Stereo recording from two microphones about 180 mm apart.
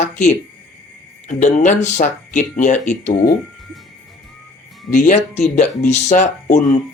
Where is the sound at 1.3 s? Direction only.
40° left (ahead or behind).